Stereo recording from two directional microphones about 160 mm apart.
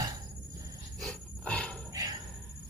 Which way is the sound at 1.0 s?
5° left (ahead or behind).